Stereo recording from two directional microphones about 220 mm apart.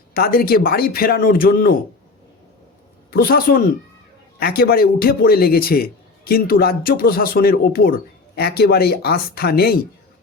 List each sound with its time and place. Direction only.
0.1 s a man's voice: 40° left (ahead or behind)
3.1 s a man's voice: 45° left (ahead or behind)